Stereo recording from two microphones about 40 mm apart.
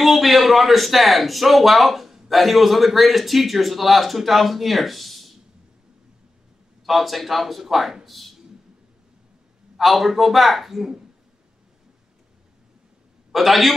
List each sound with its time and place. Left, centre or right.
0.0 s a man's voice: centre
6.9 s a man's voice: centre
9.8 s a man's voice: centre
13.3 s a man's voice: centre